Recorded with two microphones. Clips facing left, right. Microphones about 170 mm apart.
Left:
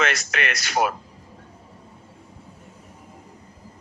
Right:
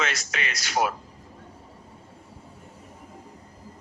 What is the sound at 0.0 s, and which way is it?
Speech, 65° left (ahead or behind).